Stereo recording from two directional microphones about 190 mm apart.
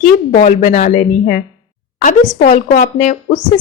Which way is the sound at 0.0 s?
40° left (ahead or behind).